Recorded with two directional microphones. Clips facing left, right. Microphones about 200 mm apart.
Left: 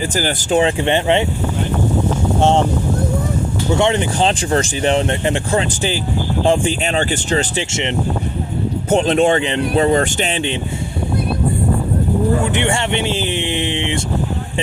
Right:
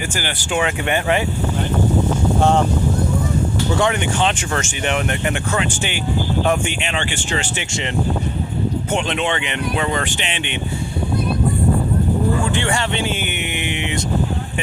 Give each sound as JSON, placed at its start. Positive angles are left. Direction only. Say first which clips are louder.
{"t": 0.2, "sound": "speech", "louder": "left 7 dB", "side_deg": 35}
{"t": 2.4, "sound": "speech", "louder": "left 2 dB", "side_deg": 25}
{"t": 3.8, "sound": "speech", "louder": "left 4 dB", "side_deg": 30}
{"t": 7.7, "sound": "speech", "louder": "left 4 dB", "side_deg": 25}
{"t": 8.9, "sound": "speech", "louder": "left 11 dB", "side_deg": 40}
{"t": 12.5, "sound": "speech", "louder": "left 3 dB", "side_deg": 25}